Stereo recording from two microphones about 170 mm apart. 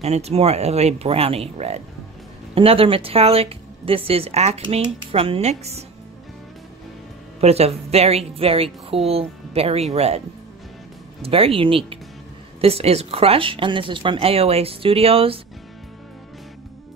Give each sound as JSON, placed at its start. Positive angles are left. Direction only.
{"t": 0.0, "sound": "a woman's voice", "side_deg": -40}
{"t": 7.3, "sound": "a woman's voice", "side_deg": -35}
{"t": 11.2, "sound": "a woman's voice", "side_deg": -35}